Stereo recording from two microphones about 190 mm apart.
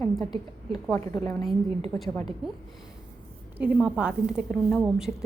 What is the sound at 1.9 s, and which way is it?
Speech, 5° left (ahead or behind).